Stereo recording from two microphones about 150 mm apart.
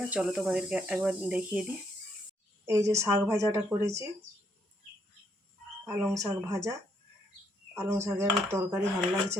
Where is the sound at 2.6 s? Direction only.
20° right (ahead or behind).